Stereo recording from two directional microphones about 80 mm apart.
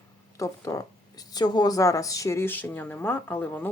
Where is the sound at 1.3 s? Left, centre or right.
Left.